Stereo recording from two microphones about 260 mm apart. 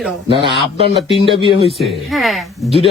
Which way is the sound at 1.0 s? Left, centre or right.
Left.